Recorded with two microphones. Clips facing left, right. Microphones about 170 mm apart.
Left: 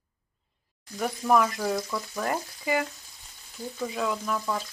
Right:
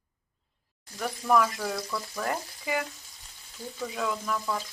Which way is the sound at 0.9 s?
15° left (ahead or behind).